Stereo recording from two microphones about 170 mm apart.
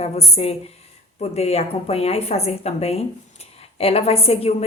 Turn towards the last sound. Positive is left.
turn(degrees=35)  # may be behind; listen again after turning